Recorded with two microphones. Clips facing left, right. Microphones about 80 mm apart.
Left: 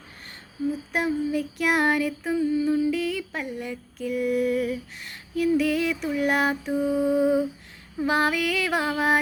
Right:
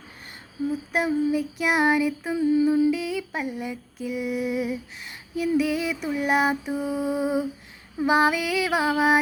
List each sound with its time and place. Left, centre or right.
0.9 s a sound: centre
2.5 s humming: right
2.9 s music: centre